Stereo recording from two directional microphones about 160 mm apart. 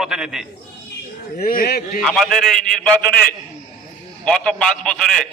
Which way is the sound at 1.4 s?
70° left (ahead or behind).